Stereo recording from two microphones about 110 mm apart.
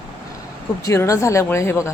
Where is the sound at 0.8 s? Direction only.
30° left (ahead or behind).